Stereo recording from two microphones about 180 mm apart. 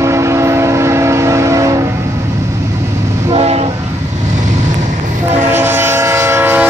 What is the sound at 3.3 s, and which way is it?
Train, 35° right (ahead or behind).